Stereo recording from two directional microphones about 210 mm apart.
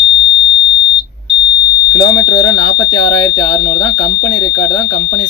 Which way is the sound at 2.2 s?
20° left (ahead or behind).